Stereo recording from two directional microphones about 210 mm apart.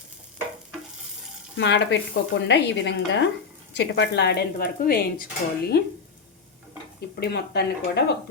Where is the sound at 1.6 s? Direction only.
55° left (ahead or behind).